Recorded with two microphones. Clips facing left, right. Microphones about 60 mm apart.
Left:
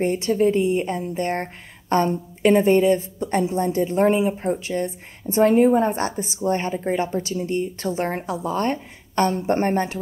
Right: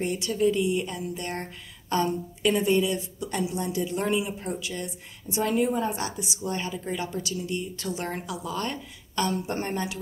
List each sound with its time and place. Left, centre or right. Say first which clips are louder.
0.0 s a woman's voice: left 6 dB; left